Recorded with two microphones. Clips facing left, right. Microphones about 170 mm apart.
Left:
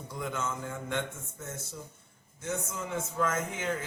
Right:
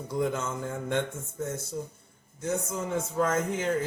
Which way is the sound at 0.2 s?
35° right (ahead or behind).